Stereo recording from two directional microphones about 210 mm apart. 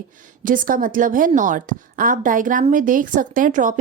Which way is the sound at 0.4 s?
40° right (ahead or behind).